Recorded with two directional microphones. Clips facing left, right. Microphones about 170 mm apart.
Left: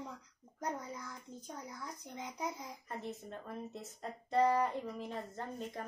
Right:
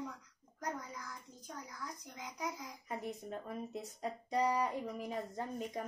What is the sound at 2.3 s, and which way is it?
Speech, 25° left (ahead or behind).